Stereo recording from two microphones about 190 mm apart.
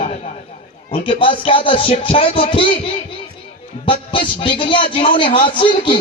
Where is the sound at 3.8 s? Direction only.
25° left (ahead or behind).